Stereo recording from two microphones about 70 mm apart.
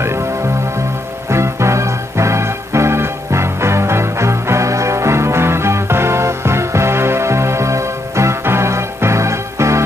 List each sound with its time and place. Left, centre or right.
1.3 s music: right